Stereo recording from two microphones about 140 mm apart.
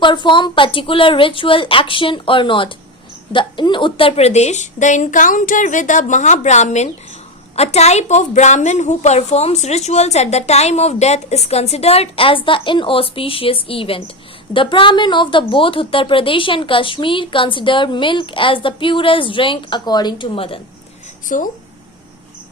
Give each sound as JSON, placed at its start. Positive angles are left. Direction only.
{"t": 0.0, "sound": "a woman's voice", "side_deg": 35}
{"t": 21.2, "sound": "speech", "side_deg": 70}